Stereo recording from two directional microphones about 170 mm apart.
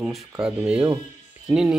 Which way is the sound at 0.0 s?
Centre (ahead or behind).